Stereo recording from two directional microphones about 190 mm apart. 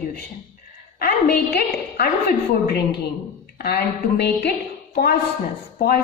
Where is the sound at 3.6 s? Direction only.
55° left (ahead or behind).